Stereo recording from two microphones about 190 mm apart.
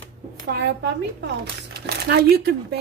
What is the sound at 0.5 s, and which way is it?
A woman's voice, 65° right (ahead or behind).